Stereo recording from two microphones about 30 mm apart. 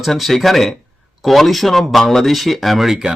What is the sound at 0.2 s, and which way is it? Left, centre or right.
Speech, centre.